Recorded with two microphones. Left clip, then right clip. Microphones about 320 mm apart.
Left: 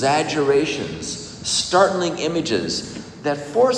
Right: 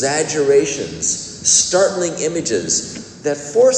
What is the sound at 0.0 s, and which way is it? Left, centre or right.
Speech, centre.